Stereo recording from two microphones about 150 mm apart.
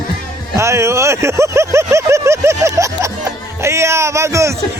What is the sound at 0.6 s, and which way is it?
Speech, 20° right (ahead or behind).